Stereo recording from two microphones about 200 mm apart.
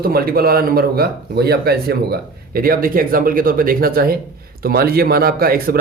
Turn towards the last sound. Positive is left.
turn(degrees=-50)  # may be behind; listen again after turning